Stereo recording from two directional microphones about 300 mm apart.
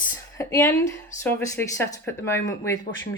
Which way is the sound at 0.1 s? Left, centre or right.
Centre.